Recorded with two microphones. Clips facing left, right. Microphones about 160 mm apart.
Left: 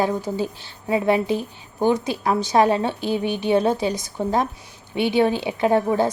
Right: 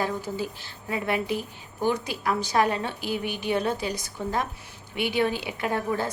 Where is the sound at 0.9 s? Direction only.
25° left (ahead or behind).